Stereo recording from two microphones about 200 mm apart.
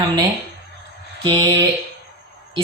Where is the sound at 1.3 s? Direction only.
25° right (ahead or behind).